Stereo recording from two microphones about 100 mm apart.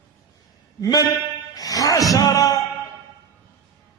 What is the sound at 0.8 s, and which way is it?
Music, 40° left (ahead or behind).